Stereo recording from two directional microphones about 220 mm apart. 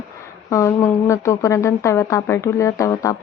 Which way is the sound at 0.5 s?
15° left (ahead or behind).